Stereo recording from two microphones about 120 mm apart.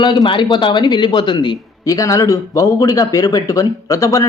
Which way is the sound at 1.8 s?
30° left (ahead or behind).